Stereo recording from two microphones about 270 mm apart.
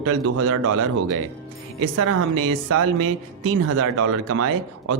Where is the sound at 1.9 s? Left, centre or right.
Right.